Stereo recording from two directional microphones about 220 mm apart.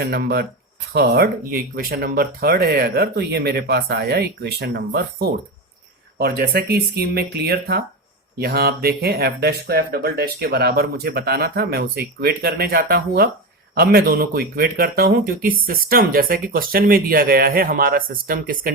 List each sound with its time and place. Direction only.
0.0 s speech: 45° right (ahead or behind)
6.1 s speech: 45° right (ahead or behind)